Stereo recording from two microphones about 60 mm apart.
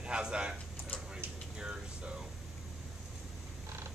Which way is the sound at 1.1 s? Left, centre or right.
Centre.